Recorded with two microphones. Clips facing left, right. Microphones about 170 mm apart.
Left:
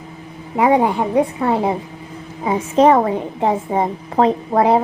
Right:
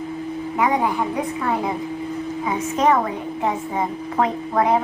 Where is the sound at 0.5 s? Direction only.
30° left (ahead or behind).